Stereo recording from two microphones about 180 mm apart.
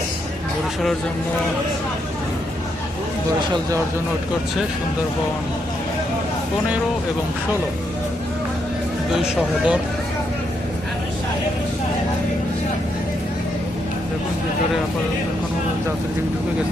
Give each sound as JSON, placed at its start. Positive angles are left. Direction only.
{"t": 9.1, "sound": "speech", "side_deg": -5}